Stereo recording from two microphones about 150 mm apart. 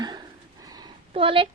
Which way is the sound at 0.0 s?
25° right (ahead or behind).